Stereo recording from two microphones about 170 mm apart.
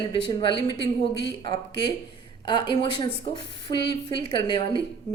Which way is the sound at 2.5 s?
25° left (ahead or behind).